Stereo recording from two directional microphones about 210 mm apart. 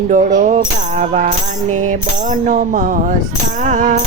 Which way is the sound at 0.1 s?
35° right (ahead or behind).